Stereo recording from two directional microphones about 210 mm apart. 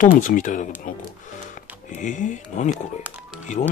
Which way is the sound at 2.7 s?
Centre (ahead or behind).